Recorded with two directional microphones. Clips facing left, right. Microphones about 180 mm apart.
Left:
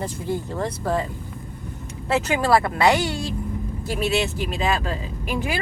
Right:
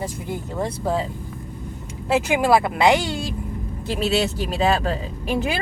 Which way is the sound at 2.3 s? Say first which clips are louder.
Right 1 dB; 15° right (ahead or behind).